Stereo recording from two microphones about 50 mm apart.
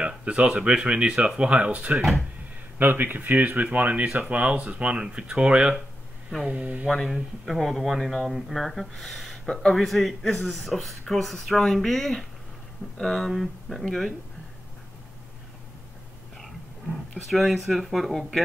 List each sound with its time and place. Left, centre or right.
0.0 s a sound: right
0.6 s speech: right
2.8 s speech: right
6.9 s speech: centre
9.5 s speech: centre
9.8 s speech: centre
13.3 s speech: centre
17.3 s speech: centre